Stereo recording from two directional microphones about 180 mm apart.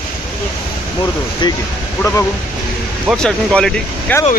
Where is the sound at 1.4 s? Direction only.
25° left (ahead or behind).